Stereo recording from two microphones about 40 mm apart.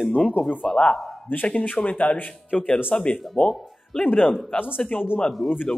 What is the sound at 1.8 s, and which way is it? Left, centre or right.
Speech, left.